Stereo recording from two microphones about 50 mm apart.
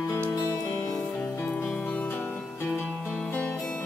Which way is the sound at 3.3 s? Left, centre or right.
Left.